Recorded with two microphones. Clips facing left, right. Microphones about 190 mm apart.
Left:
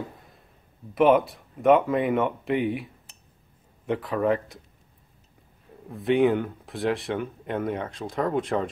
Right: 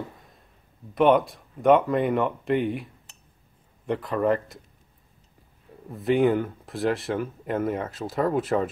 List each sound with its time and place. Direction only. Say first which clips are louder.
0.9 s speech: even; centre (ahead or behind)
5.9 s speech: even; centre (ahead or behind)